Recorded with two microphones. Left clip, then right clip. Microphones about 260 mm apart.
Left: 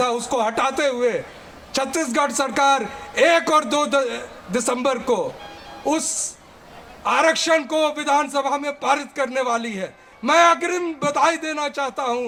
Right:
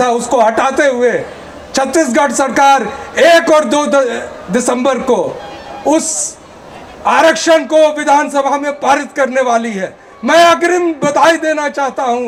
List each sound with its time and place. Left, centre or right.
0.0 s a man's voice: left
7.0 s a man's voice: centre